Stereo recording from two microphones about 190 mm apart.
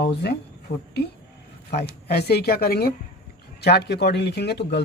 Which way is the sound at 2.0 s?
55° left (ahead or behind).